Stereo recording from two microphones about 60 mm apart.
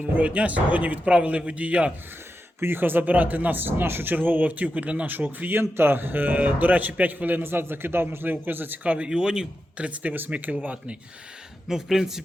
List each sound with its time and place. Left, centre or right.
0.2 s speech: right
2.6 s speech: right
5.5 s speech: right
9.0 s speech: centre
11.7 s speech: centre